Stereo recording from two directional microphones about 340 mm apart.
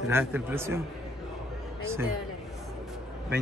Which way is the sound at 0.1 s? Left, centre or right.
Centre.